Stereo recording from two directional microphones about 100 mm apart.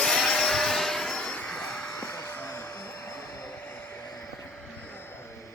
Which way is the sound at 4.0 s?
40° left (ahead or behind).